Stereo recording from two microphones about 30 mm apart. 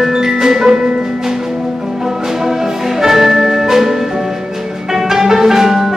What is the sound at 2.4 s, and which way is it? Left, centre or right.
Music, centre.